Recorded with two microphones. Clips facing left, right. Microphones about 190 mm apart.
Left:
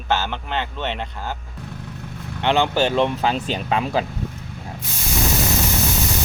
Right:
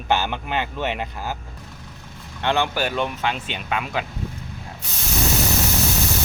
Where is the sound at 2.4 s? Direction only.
20° left (ahead or behind).